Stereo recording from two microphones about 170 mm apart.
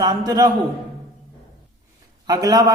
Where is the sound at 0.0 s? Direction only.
20° right (ahead or behind).